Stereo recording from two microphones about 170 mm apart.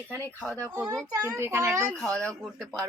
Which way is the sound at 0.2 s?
10° left (ahead or behind).